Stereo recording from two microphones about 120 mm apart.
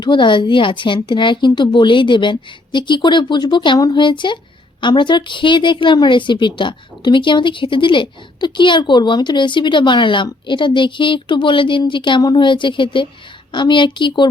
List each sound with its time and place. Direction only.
0.0 s speech: 40° left (ahead or behind)